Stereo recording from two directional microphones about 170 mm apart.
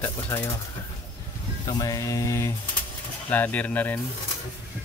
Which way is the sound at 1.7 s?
20° left (ahead or behind).